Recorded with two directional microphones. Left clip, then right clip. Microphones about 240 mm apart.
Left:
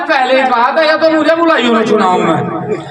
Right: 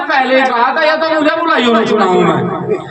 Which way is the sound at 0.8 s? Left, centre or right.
Right.